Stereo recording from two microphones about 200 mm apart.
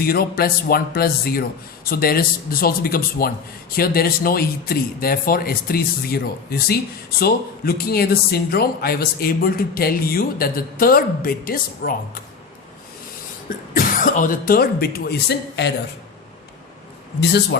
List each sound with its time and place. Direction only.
0.0 s speech: 50° left (ahead or behind)
13.7 s speech: 45° left (ahead or behind)
17.2 s a man's voice: 55° left (ahead or behind)